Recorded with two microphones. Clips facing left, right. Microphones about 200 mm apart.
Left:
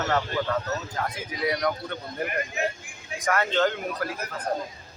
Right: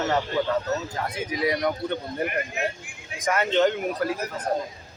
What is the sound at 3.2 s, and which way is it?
Speech, 20° right (ahead or behind).